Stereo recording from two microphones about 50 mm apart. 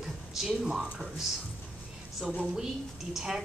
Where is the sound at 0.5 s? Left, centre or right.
Centre.